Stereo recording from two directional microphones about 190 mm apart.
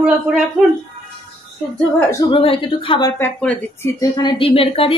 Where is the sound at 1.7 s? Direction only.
10° left (ahead or behind).